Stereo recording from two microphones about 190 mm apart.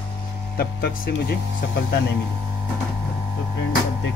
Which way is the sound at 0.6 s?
55° left (ahead or behind).